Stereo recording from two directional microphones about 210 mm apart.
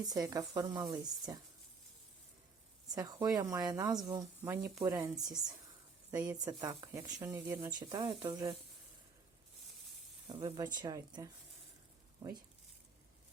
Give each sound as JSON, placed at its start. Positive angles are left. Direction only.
{"t": 0.1, "sound": "speech", "side_deg": -15}
{"t": 2.9, "sound": "speech", "side_deg": -20}
{"t": 10.2, "sound": "speech", "side_deg": -20}